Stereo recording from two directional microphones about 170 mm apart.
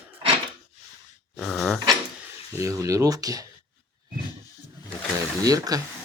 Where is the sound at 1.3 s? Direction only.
Centre (ahead or behind).